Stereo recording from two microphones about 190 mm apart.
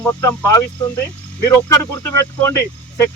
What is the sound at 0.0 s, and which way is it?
Speech, 15° left (ahead or behind).